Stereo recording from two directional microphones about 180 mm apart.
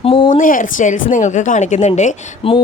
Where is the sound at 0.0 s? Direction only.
30° left (ahead or behind).